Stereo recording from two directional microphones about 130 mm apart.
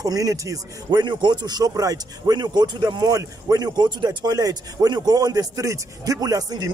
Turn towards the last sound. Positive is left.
turn(degrees=-30)  # may be behind; listen again after turning